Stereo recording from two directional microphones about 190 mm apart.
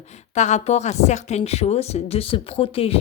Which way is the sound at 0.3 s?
40° left (ahead or behind).